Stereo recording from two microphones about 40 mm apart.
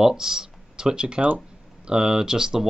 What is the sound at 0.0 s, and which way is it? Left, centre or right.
Speech, centre.